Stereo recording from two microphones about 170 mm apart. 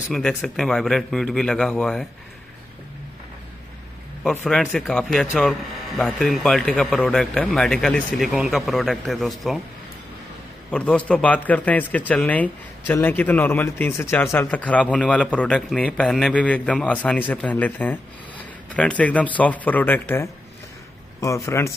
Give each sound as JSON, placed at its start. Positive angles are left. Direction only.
{"t": 0.1, "sound": "speech", "side_deg": 0}
{"t": 4.2, "sound": "speech", "side_deg": 5}
{"t": 10.7, "sound": "a man's voice", "side_deg": 5}